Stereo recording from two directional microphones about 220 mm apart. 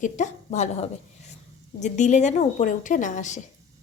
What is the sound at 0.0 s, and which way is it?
A woman's voice, 30° left (ahead or behind).